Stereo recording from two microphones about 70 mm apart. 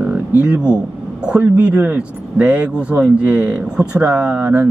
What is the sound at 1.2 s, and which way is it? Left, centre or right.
Speech, centre.